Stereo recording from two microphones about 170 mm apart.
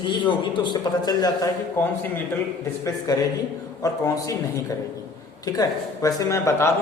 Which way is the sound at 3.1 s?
20° left (ahead or behind).